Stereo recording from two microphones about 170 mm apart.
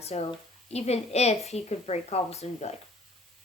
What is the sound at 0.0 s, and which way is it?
A woman's voice, 35° left (ahead or behind).